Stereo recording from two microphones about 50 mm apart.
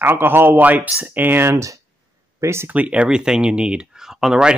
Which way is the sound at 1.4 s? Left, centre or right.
Right.